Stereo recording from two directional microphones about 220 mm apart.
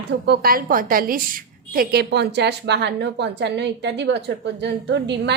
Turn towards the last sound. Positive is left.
turn(degrees=-50)  # may be behind; listen again after turning